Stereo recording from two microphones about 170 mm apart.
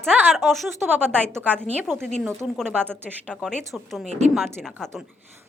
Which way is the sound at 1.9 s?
5° left (ahead or behind).